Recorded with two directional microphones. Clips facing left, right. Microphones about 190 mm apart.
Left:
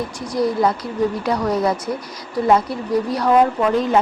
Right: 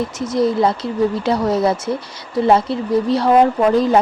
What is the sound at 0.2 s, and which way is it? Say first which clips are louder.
Speech: right 2 dB; 25° right (ahead or behind).